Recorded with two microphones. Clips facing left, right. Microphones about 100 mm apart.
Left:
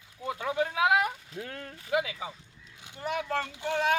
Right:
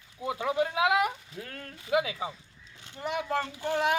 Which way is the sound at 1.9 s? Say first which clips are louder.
Right 2 dB; 25° right (ahead or behind).